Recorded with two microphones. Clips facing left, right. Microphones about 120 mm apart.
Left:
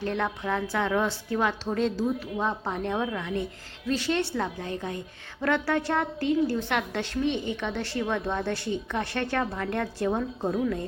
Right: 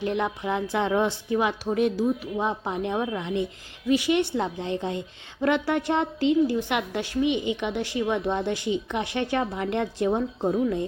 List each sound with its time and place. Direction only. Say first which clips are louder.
0.0 s a woman's voice: right 2 dB; 15° right (ahead or behind)